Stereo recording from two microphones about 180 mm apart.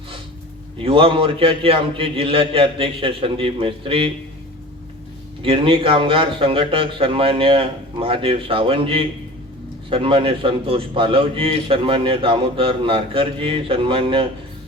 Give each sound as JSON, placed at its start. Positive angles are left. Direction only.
{"t": 0.8, "sound": "a man's voice", "side_deg": -30}
{"t": 5.4, "sound": "a man's voice", "side_deg": -30}